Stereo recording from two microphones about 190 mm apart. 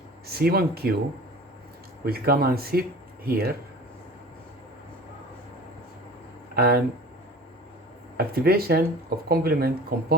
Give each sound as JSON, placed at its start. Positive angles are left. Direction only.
{"t": 0.3, "sound": "speech", "side_deg": -55}
{"t": 2.0, "sound": "speech", "side_deg": -55}
{"t": 6.6, "sound": "speech", "side_deg": -55}
{"t": 8.3, "sound": "speech", "side_deg": -55}